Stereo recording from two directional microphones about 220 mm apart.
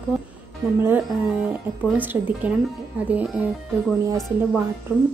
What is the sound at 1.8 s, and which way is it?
A woman's voice, 5° right (ahead or behind).